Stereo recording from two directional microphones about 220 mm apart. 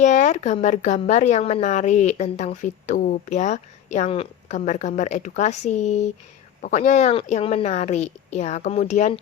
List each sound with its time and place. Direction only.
0.0 s speech: 35° left (ahead or behind)